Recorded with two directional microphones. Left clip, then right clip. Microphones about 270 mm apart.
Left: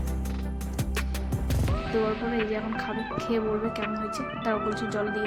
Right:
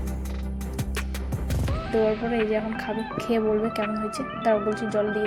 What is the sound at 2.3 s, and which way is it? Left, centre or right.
Speech, centre.